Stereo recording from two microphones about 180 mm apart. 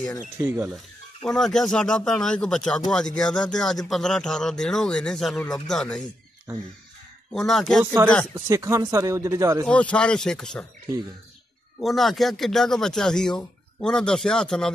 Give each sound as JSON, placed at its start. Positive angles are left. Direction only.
{"t": 0.2, "sound": "speech", "side_deg": -15}
{"t": 1.2, "sound": "speech", "side_deg": 0}
{"t": 7.3, "sound": "speech", "side_deg": 0}
{"t": 7.8, "sound": "speech", "side_deg": -15}
{"t": 9.7, "sound": "speech", "side_deg": 5}
{"t": 11.8, "sound": "speech", "side_deg": 0}